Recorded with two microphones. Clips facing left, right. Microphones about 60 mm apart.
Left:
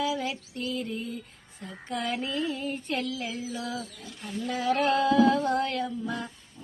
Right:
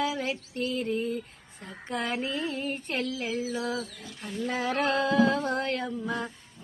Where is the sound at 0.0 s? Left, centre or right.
Right.